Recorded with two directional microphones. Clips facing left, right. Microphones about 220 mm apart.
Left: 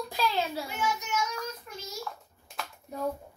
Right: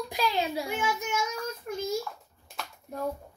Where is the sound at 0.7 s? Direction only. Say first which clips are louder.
Right 2 dB; 50° right (ahead or behind).